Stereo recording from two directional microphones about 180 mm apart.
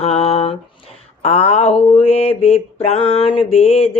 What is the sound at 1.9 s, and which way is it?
Speech, 35° left (ahead or behind).